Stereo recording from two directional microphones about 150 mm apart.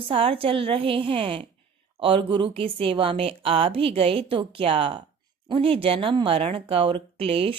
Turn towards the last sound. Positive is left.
turn(degrees=-40)  # may be behind; listen again after turning